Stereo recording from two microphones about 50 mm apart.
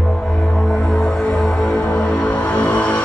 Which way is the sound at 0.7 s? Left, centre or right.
Centre.